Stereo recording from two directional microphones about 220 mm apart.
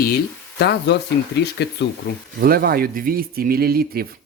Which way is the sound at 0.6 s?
50° left (ahead or behind).